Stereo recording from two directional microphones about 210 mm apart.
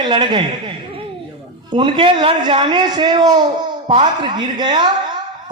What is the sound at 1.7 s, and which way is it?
A man's voice, 25° right (ahead or behind).